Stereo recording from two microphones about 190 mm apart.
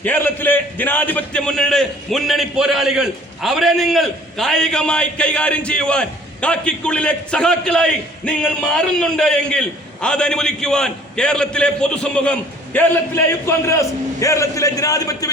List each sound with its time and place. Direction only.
0.0 s a man's voice: 10° left (ahead or behind)